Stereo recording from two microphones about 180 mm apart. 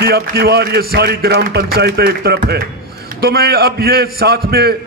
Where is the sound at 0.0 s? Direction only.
60° right (ahead or behind).